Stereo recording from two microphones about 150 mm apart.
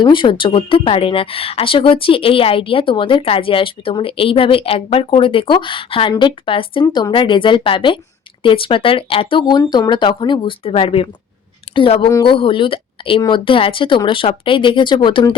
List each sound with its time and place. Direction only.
0.0 s a woman's voice: 30° left (ahead or behind)